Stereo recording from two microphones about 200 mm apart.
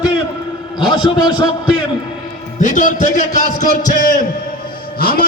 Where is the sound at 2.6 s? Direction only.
40° left (ahead or behind).